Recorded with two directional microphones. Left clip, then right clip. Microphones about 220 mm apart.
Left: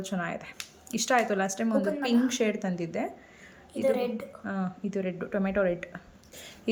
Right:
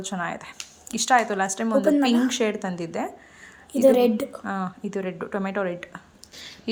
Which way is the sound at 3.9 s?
40° right (ahead or behind).